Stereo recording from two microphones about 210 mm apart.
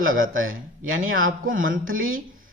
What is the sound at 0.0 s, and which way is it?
Speech, 70° right (ahead or behind).